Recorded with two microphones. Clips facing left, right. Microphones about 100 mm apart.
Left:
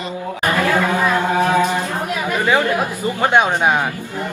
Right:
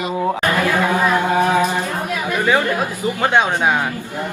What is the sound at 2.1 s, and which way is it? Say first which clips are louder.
Speech: even; 20° left (ahead or behind).